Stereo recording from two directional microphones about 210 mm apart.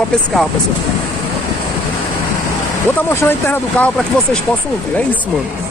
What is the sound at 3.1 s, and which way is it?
Speech, 10° left (ahead or behind).